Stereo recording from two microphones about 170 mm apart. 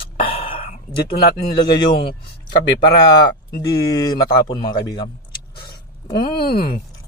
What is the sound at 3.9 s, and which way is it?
A man's voice, 25° left (ahead or behind).